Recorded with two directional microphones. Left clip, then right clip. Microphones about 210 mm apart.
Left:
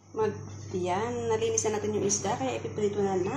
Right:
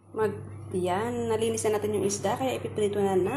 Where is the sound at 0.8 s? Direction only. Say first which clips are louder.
Right 1 dB; 20° right (ahead or behind).